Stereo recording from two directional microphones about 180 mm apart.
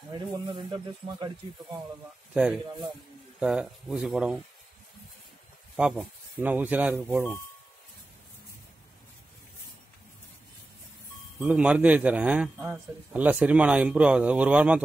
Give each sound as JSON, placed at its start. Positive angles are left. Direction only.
{"t": 0.1, "sound": "speech", "side_deg": -25}
{"t": 3.3, "sound": "speech", "side_deg": -5}
{"t": 5.8, "sound": "a man's voice", "side_deg": -5}
{"t": 11.3, "sound": "a man's voice", "side_deg": -5}